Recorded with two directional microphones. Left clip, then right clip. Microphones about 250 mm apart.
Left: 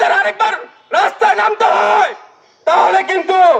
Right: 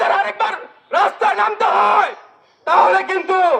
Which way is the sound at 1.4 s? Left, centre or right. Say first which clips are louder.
Left 3 dB; left.